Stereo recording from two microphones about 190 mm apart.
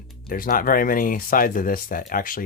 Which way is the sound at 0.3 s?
50° left (ahead or behind).